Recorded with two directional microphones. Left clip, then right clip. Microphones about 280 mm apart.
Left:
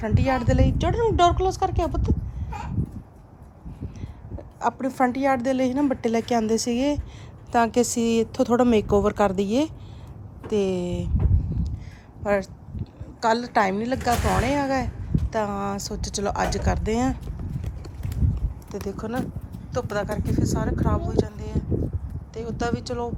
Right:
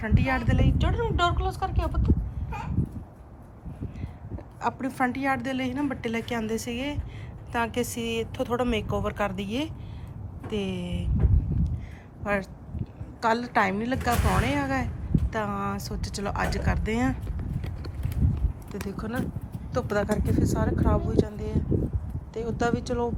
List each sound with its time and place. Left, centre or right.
0.0 s a woman's voice: centre
4.0 s a woman's voice: centre
12.2 s a woman's voice: centre
18.7 s a woman's voice: centre